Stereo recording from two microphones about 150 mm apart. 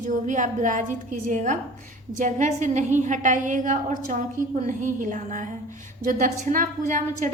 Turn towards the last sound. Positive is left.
turn(degrees=-60)  # may be behind; listen again after turning